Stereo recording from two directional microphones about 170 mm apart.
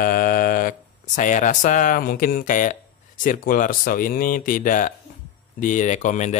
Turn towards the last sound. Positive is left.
turn(degrees=45)  # may be behind; listen again after turning